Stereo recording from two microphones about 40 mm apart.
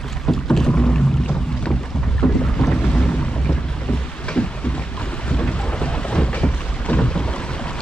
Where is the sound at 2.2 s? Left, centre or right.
Left.